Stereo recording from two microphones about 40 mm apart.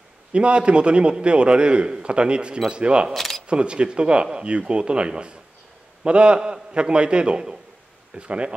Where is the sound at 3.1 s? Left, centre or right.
Centre.